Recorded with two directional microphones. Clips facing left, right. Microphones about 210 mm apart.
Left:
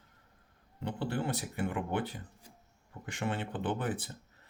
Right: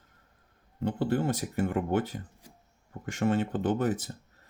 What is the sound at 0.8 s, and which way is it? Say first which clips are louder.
Speech: right 7 dB; 45° right (ahead or behind).